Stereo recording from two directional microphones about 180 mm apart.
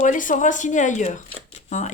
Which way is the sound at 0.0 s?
45° left (ahead or behind).